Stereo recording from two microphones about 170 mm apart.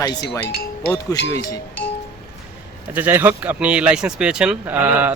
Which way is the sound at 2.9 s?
10° right (ahead or behind).